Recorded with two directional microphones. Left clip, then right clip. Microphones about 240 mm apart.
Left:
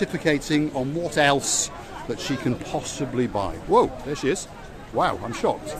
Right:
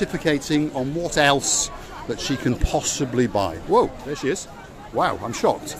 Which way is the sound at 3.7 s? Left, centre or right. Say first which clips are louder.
Left 1 dB; centre.